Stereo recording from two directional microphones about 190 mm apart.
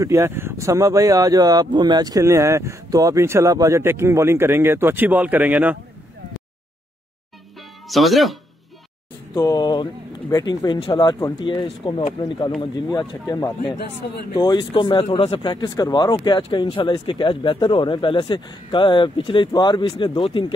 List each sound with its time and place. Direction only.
0.0 s speech: 15° right (ahead or behind)
7.9 s speech: centre (ahead or behind)
9.3 s speech: 20° left (ahead or behind)